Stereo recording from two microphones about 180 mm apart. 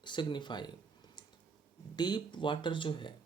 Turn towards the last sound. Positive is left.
turn(degrees=25)  # may be behind; listen again after turning